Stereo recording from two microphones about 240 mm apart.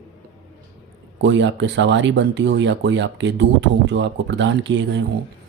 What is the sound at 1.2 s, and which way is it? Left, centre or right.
Speech, right.